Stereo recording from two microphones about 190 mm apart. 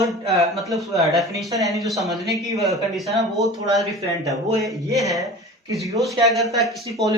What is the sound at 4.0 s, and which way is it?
Speech, 15° right (ahead or behind).